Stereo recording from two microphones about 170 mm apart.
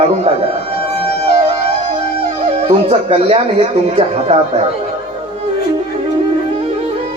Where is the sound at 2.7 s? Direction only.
35° right (ahead or behind).